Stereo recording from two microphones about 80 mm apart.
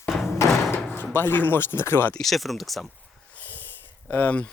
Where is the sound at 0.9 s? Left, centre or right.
Left.